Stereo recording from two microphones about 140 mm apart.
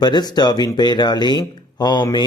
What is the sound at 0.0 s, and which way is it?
Speech, 30° left (ahead or behind).